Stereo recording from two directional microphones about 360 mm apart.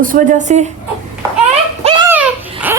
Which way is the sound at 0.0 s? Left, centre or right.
Right.